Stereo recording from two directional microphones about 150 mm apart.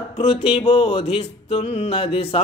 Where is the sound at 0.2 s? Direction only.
40° left (ahead or behind).